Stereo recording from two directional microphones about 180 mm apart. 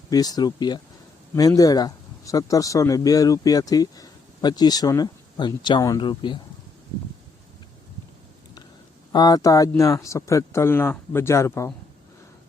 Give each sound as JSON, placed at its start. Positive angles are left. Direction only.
{"t": 0.1, "sound": "speech", "side_deg": 20}
{"t": 9.1, "sound": "speech", "side_deg": 20}